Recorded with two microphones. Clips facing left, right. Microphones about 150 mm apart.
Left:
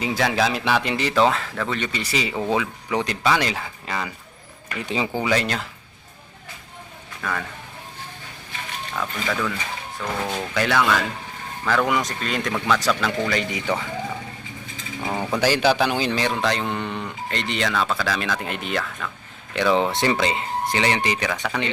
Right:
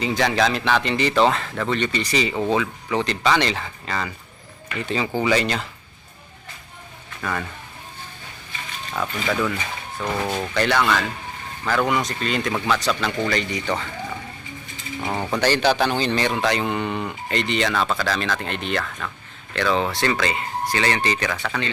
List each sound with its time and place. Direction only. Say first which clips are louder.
0.0 s speech: right 1 dB; 5° left (ahead or behind)
7.2 s speech: right 1 dB; 5° right (ahead or behind)
9.0 s speech: right 3 dB; 5° right (ahead or behind); by 13.9 s 10° left (ahead or behind)
15.0 s speech: even; 5° right (ahead or behind)
15.3 s speech: even; 5° left (ahead or behind)
19.5 s speech: left 2 dB; 15° left (ahead or behind)